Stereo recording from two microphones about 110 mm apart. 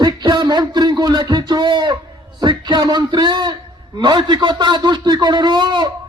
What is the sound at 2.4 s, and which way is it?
Speech, 40° right (ahead or behind).